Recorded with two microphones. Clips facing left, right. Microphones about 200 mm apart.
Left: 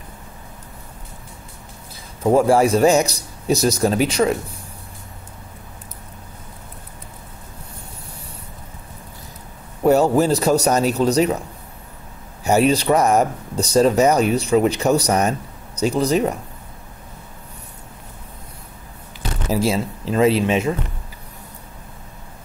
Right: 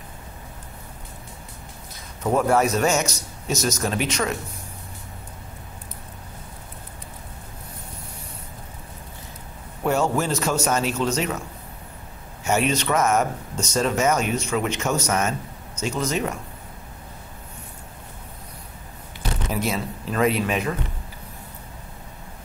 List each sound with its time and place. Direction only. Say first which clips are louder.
2.2 s speech: left 5 dB; 30° left (ahead or behind)
9.8 s speech: left 7 dB; 35° left (ahead or behind)
12.4 s speech: left 6 dB; 35° left (ahead or behind)
19.5 s speech: left 7 dB; 30° left (ahead or behind)